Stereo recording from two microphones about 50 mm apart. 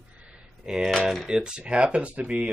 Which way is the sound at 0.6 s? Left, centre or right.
Centre.